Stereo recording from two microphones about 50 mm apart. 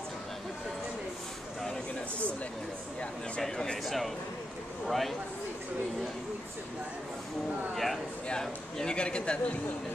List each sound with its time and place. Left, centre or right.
3.0 s a man's voice: centre
7.7 s a man's voice: centre
8.3 s speech: centre